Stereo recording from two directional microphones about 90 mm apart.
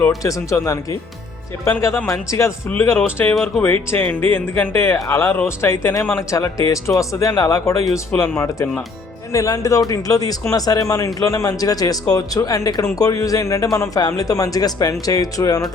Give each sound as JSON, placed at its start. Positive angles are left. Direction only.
{"t": 0.2, "sound": "speech", "side_deg": 40}
{"t": 3.3, "sound": "speech", "side_deg": 0}
{"t": 3.6, "sound": "speech", "side_deg": 25}
{"t": 9.3, "sound": "speech", "side_deg": 35}